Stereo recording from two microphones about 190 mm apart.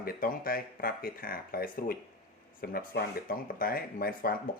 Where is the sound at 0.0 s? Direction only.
50° left (ahead or behind).